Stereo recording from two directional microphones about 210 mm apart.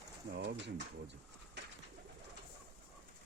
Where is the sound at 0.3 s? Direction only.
55° right (ahead or behind).